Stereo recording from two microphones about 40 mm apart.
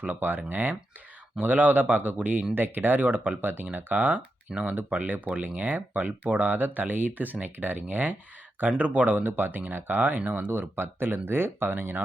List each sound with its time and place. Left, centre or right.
0.0 s speech: right
1.4 s a man's voice: right
2.6 s speech: right